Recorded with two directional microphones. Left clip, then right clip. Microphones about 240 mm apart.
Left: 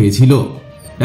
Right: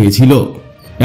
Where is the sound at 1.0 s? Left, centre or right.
Right.